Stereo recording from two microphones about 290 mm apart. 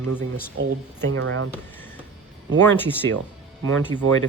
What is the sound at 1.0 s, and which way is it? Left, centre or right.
Speech, right.